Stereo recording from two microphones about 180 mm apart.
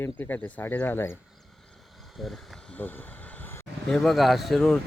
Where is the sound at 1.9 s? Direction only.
Centre (ahead or behind).